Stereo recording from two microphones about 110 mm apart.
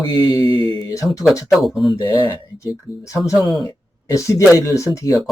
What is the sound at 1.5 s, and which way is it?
Speech, centre (ahead or behind).